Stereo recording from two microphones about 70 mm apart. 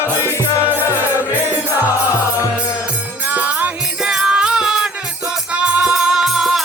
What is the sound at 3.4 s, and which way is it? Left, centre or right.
Music, right.